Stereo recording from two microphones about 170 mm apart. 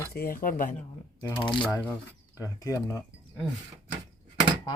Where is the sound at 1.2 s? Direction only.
25° left (ahead or behind).